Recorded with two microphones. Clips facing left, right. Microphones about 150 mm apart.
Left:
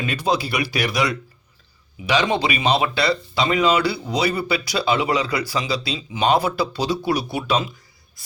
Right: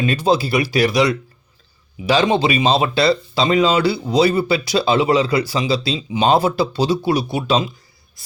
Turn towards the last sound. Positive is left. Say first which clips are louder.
# right 4 dB
turn(degrees=-25)  # may be behind; listen again after turning